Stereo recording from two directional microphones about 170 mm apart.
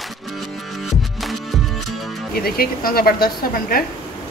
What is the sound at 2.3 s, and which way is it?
Speech, 60° left (ahead or behind).